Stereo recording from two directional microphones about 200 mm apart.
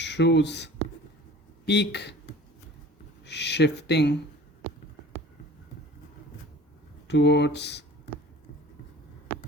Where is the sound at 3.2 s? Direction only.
60° left (ahead or behind).